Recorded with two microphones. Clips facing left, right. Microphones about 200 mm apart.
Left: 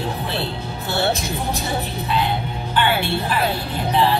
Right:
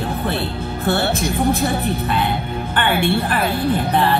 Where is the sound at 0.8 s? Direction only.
55° right (ahead or behind).